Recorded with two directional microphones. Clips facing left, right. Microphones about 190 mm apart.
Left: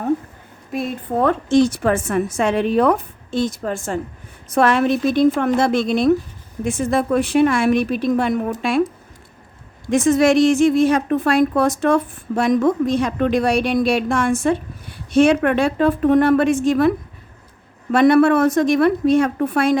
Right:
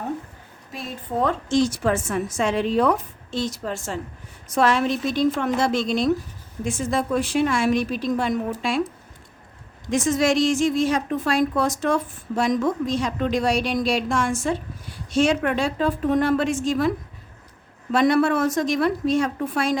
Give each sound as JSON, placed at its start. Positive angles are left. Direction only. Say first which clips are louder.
{"t": 0.7, "sound": "a woman's voice", "louder": "left 7 dB", "side_deg": 55}
{"t": 9.9, "sound": "a woman's voice", "louder": "left 6 dB", "side_deg": 60}
{"t": 17.9, "sound": "a woman's voice", "louder": "left 6 dB", "side_deg": 60}